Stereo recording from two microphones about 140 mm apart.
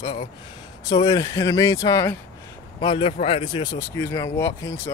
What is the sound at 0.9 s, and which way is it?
Speech, 30° left (ahead or behind).